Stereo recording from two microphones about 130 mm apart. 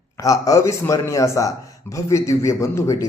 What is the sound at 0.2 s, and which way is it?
Speech, 25° left (ahead or behind).